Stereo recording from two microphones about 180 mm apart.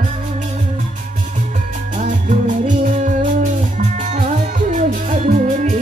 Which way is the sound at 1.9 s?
45° right (ahead or behind).